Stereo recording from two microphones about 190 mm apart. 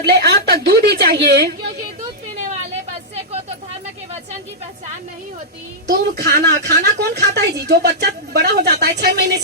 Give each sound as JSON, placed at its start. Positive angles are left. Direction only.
{"t": 0.0, "sound": "speech", "side_deg": -55}
{"t": 5.9, "sound": "speech", "side_deg": -55}